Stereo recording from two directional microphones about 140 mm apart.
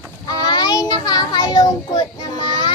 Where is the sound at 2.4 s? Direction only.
35° left (ahead or behind).